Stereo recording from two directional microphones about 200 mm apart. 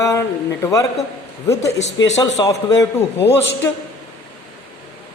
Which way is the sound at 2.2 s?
15° left (ahead or behind).